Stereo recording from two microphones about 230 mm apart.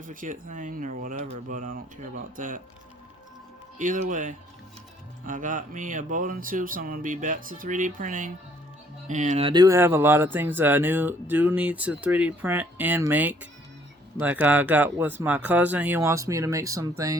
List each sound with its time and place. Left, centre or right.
0.0 s speech: right
3.8 s speech: right
9.5 s speech: centre